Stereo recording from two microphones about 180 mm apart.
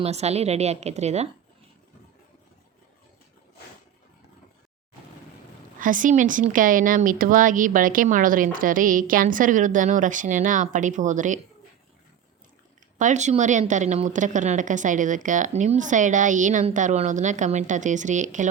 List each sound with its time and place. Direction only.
0.0 s a woman's voice: 35° right (ahead or behind)
5.8 s speech: 45° right (ahead or behind)
13.0 s speech: 40° right (ahead or behind)